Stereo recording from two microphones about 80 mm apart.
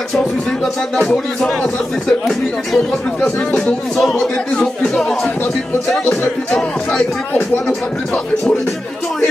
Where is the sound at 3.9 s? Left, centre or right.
Centre.